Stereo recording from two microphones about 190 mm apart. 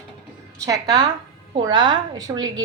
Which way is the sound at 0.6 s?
20° right (ahead or behind).